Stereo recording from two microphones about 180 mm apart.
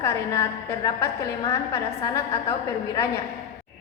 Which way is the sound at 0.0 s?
15° left (ahead or behind).